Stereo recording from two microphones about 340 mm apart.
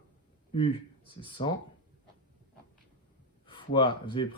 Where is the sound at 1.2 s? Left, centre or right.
Centre.